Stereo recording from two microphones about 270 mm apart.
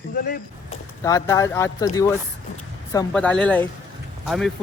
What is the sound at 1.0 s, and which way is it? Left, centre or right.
A man's voice, centre.